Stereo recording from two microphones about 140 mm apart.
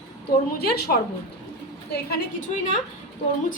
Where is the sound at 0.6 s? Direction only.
90° left.